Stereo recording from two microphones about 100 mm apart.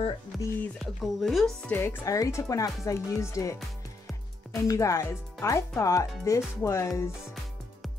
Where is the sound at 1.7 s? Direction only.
20° left (ahead or behind).